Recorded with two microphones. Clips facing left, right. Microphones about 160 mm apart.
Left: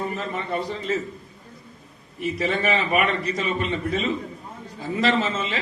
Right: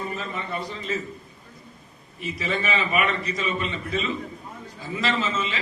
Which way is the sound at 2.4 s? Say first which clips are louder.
Left 2 dB; 55° left (ahead or behind).